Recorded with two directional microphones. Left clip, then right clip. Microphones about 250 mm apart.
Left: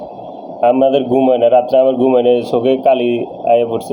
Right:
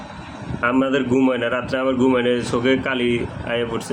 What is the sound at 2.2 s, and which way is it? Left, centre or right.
Speech, centre.